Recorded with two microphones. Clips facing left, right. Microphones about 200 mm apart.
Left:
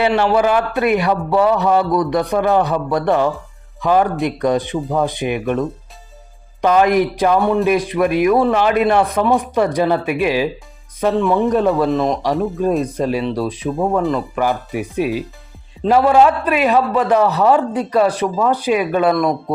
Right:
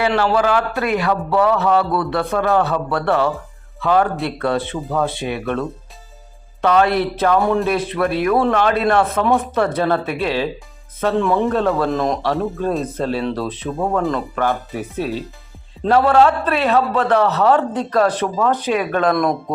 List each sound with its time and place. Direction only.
0.2 s a man's voice: 20° left (ahead or behind)
7.3 s speech: centre (ahead or behind)
7.6 s a man's voice: 15° left (ahead or behind)
11.1 s speech: centre (ahead or behind)
11.4 s a man's voice: 15° left (ahead or behind)
11.9 s speech: centre (ahead or behind)
12.8 s a man's voice: 10° left (ahead or behind)
14.0 s a man's voice: 5° left (ahead or behind)